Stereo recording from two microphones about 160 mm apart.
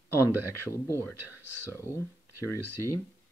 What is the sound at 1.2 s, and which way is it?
Speech, 15° right (ahead or behind).